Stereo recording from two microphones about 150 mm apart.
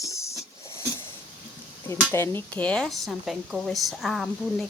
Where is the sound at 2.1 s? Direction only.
15° left (ahead or behind).